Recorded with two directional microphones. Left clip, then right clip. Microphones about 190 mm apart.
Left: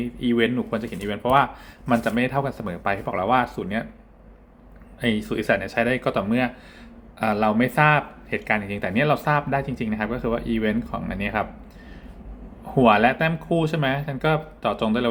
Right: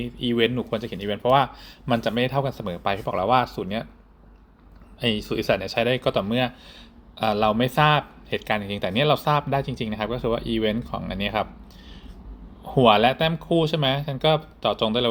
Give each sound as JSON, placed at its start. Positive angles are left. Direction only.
{"t": 0.0, "sound": "speech", "side_deg": -25}
{"t": 4.9, "sound": "speech", "side_deg": -25}
{"t": 12.6, "sound": "speech", "side_deg": -25}